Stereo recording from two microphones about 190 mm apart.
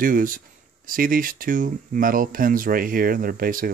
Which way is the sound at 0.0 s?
45° right (ahead or behind).